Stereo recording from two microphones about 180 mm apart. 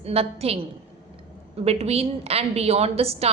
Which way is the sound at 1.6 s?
35° right (ahead or behind).